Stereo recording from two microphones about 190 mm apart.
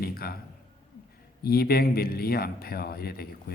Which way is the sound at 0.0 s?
55° left (ahead or behind).